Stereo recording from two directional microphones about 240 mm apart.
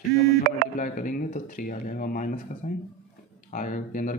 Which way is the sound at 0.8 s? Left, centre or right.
Left.